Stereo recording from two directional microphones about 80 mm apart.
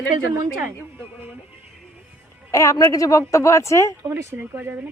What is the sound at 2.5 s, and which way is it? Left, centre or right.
Speech, left.